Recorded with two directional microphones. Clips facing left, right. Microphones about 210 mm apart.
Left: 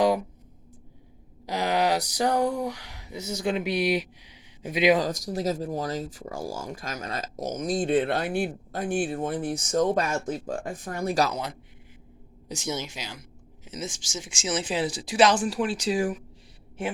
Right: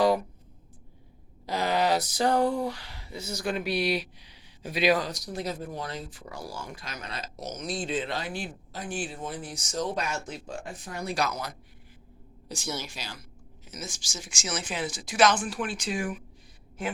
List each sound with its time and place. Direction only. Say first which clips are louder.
1.5 s speech: left 1 dB; 15° left (ahead or behind)
4.9 s speech: left 5 dB; 40° left (ahead or behind)
11.3 s speech: left 3 dB; 25° left (ahead or behind)